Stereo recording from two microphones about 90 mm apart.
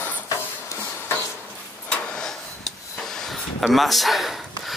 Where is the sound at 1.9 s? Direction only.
10° left (ahead or behind).